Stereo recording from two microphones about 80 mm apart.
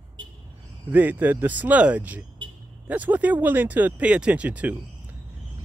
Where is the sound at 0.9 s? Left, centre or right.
Right.